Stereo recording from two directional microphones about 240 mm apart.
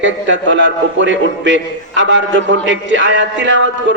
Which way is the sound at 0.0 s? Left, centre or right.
Right.